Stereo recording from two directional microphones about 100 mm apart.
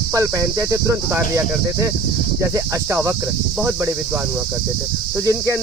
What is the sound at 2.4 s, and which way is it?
Cricket, 30° right (ahead or behind).